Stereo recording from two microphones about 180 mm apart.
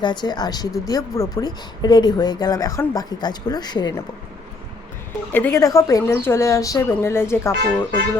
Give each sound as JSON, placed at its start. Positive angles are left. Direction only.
{"t": 0.0, "sound": "speech", "side_deg": 25}
{"t": 5.3, "sound": "a woman's voice", "side_deg": 10}